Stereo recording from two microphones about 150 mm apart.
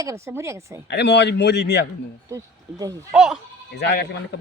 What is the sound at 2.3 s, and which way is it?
Speech, 25° right (ahead or behind).